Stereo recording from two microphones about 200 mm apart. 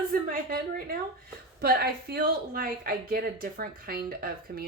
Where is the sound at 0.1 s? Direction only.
45° right (ahead or behind).